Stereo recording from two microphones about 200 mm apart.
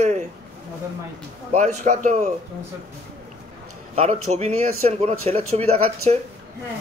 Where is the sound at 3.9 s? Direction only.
30° right (ahead or behind).